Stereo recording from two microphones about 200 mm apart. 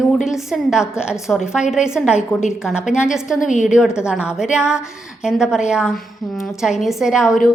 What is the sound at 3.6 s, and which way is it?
A woman's voice, 5° right (ahead or behind).